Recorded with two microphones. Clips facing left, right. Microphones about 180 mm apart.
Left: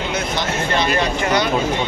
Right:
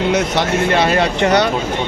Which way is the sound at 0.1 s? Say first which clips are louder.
Right 6 dB; 70° right (ahead or behind).